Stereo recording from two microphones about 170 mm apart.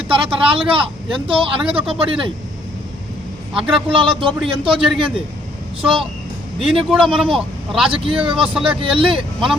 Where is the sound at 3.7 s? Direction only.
30° right (ahead or behind).